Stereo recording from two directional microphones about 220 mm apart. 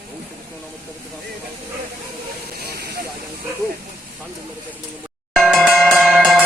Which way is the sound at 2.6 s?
45° right (ahead or behind).